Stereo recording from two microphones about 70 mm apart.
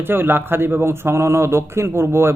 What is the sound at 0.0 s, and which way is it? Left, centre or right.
Speech, right.